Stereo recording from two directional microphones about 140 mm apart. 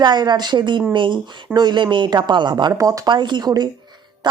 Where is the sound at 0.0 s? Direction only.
30° right (ahead or behind).